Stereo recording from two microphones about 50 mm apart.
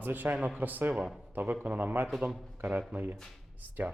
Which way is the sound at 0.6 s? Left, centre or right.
Right.